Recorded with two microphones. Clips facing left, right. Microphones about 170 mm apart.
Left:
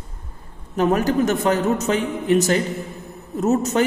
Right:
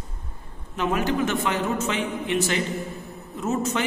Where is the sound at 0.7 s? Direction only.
40° left (ahead or behind).